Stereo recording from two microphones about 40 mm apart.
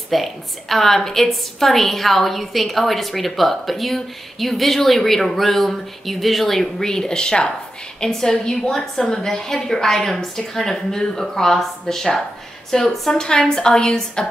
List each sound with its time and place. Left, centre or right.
0.1 s a woman's voice: centre
6.8 s a woman's voice: centre